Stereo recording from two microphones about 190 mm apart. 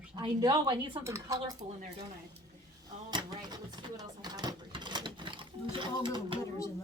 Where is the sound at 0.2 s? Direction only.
20° right (ahead or behind).